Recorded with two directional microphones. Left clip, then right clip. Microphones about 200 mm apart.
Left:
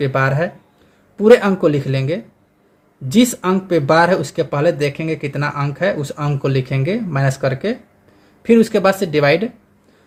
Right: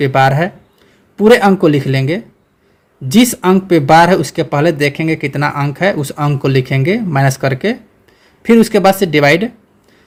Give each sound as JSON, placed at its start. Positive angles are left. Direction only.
{"t": 0.0, "sound": "speech", "side_deg": -35}